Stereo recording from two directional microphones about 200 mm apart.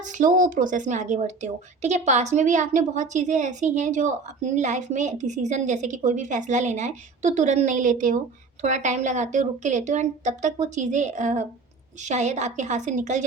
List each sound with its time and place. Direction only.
0.0 s speech: 40° right (ahead or behind)